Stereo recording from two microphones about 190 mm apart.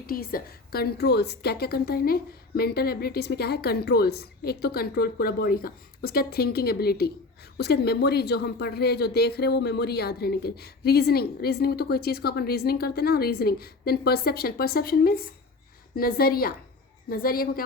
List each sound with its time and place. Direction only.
0.1 s a woman's voice: 50° left (ahead or behind)